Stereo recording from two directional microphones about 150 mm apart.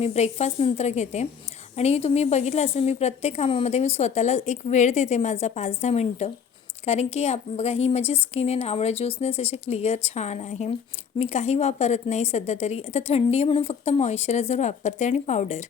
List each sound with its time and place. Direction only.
0.0 s a woman's voice: 45° left (ahead or behind)